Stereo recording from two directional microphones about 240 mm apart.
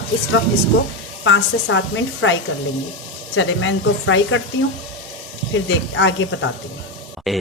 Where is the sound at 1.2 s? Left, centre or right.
Left.